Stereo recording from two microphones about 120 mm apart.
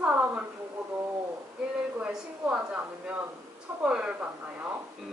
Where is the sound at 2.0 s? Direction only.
10° right (ahead or behind).